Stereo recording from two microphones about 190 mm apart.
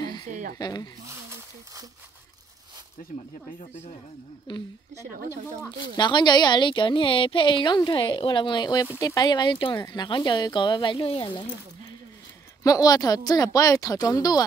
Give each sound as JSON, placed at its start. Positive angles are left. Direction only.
{"t": 0.3, "sound": "a sound", "side_deg": -45}
{"t": 0.6, "sound": "a woman's voice", "side_deg": 20}
{"t": 1.0, "sound": "a sound", "side_deg": -15}
{"t": 4.5, "sound": "a woman's voice", "side_deg": 25}
{"t": 5.1, "sound": "speech", "side_deg": -50}
{"t": 5.9, "sound": "a woman's voice", "side_deg": 25}
{"t": 12.6, "sound": "a woman's voice", "side_deg": 20}